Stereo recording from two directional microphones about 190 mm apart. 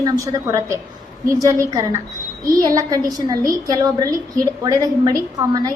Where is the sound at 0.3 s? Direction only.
15° right (ahead or behind).